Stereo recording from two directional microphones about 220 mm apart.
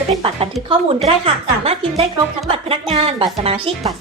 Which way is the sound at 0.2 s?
25° right (ahead or behind).